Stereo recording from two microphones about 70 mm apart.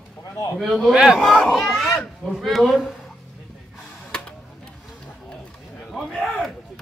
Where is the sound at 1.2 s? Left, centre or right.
Centre.